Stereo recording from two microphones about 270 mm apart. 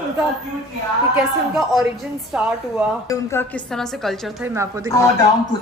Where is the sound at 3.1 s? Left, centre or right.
Centre.